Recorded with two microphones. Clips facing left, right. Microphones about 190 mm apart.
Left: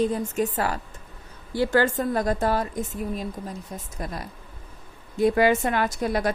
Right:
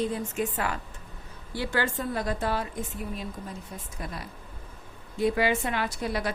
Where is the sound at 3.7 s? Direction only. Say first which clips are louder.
Left 4 dB; 40° left (ahead or behind).